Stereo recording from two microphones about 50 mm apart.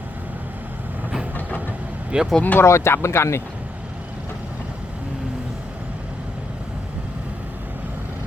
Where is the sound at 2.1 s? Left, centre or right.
Right.